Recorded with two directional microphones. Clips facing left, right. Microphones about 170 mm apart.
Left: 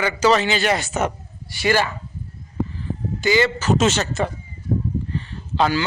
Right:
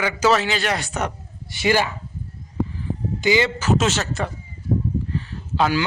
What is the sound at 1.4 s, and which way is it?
Speech, 20° right (ahead or behind).